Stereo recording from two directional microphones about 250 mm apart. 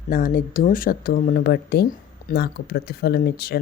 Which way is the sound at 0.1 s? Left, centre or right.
Left.